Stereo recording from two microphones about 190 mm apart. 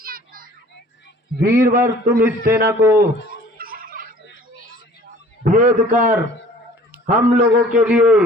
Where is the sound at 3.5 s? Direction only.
50° right (ahead or behind).